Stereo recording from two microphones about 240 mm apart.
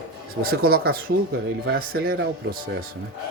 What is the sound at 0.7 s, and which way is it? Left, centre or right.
A man's voice, right.